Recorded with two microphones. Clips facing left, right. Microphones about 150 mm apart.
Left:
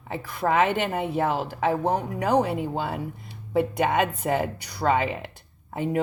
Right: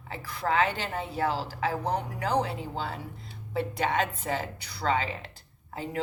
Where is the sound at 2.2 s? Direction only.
15° left (ahead or behind).